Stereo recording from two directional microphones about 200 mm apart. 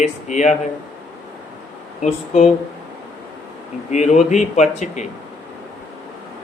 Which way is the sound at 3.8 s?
35° left (ahead or behind).